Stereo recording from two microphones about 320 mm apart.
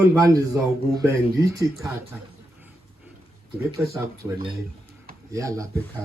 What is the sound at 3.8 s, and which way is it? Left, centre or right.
Speech, centre.